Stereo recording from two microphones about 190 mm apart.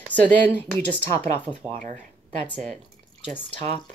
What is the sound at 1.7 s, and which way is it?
Speech, 40° right (ahead or behind).